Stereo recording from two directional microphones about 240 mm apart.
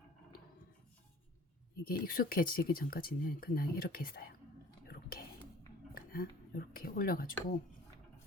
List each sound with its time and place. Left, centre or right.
1.8 s speech: left
4.9 s whispering: left
5.9 s speech: left